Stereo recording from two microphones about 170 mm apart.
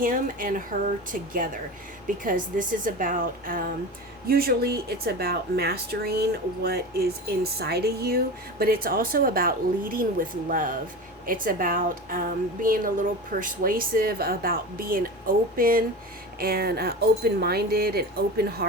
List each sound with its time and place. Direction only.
0.0 s a woman's voice: 55° right (ahead or behind)